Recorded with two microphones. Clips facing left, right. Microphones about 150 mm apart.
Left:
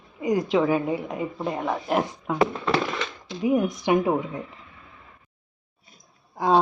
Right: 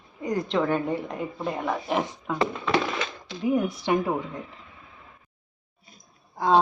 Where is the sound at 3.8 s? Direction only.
15° left (ahead or behind).